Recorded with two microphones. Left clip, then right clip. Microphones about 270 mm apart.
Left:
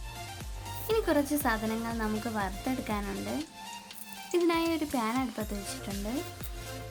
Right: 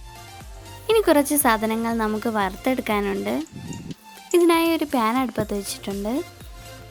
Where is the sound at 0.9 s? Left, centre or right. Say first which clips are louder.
Right 10 dB; right.